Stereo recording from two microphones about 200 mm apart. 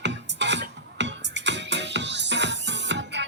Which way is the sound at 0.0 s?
60° right (ahead or behind).